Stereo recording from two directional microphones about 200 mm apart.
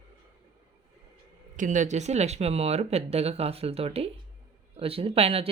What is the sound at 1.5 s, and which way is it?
Speech, 40° right (ahead or behind).